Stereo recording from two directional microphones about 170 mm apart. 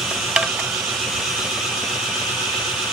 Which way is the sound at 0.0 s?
Centre (ahead or behind).